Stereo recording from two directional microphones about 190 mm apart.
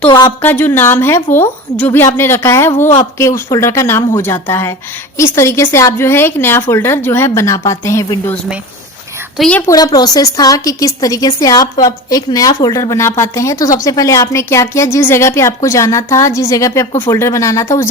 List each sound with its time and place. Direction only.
0.4 s a woman's voice: 10° left (ahead or behind)
9.4 s a woman's voice: 5° left (ahead or behind)
9.6 s a woman's voice: 20° left (ahead or behind)